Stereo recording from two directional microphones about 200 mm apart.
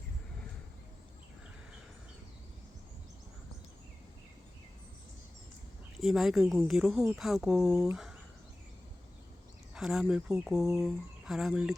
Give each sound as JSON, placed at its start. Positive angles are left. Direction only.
{"t": 6.0, "sound": "speech", "side_deg": 0}
{"t": 9.7, "sound": "speech", "side_deg": -5}